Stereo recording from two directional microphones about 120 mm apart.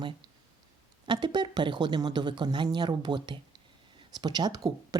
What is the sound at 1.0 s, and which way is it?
A woman's voice, 40° right (ahead or behind).